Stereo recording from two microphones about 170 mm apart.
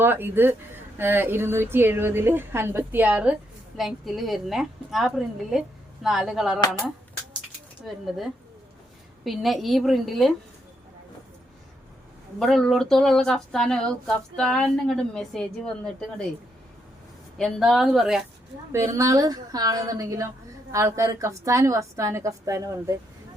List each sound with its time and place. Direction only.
0.0 s a woman's voice: 10° right (ahead or behind)
7.9 s a woman's voice: centre (ahead or behind)
12.4 s a woman's voice: centre (ahead or behind)
17.3 s a woman's voice: centre (ahead or behind)
18.7 s a woman's voice: 15° right (ahead or behind)